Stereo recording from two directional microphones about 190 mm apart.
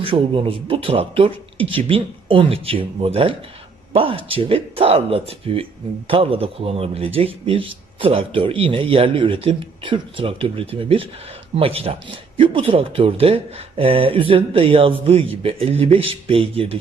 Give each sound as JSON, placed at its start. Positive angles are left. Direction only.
{"t": 0.0, "sound": "speech", "side_deg": -30}